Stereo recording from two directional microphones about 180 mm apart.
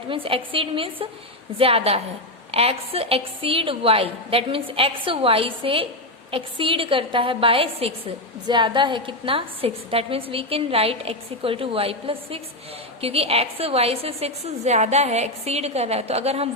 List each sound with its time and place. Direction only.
0.1 s a woman's voice: 30° right (ahead or behind)